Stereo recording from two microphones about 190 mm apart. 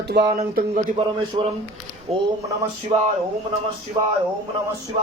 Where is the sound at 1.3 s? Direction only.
25° right (ahead or behind).